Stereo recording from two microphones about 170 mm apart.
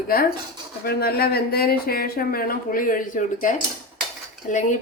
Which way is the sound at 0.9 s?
65° left (ahead or behind).